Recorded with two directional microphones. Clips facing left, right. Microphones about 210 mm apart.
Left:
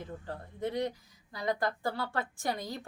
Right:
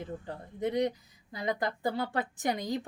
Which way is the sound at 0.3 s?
20° right (ahead or behind).